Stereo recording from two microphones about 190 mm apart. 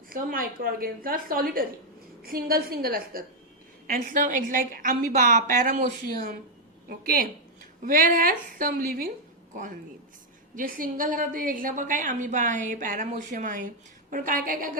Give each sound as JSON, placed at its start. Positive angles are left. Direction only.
{"t": 0.1, "sound": "a woman's voice", "side_deg": -50}
{"t": 6.8, "sound": "a woman's voice", "side_deg": -50}
{"t": 10.5, "sound": "a woman's voice", "side_deg": -45}